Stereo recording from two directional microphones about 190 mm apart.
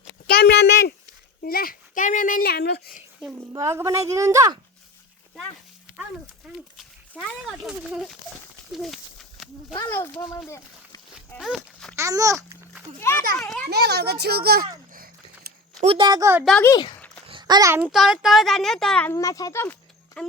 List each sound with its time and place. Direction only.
0.3 s a sound: 50° left (ahead or behind)
3.3 s a woman's voice: 15° right (ahead or behind)
6.7 s a child's voice: centre (ahead or behind)
9.7 s a child's voice: 15° left (ahead or behind)
11.3 s walk: centre (ahead or behind)
11.9 s a woman's voice: 15° right (ahead or behind)
13.0 s a child's voice: 15° left (ahead or behind)
13.7 s speech: 60° right (ahead or behind)
14.9 s dog: 50° right (ahead or behind)
15.8 s speech: 30° right (ahead or behind)
16.5 s a child's voice: 10° left (ahead or behind)
17.2 s a child's voice: 25° right (ahead or behind); by 20.3 s 5° left (ahead or behind)